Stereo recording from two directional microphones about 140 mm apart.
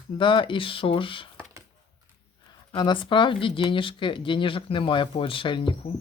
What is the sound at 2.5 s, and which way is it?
Speech, 30° left (ahead or behind).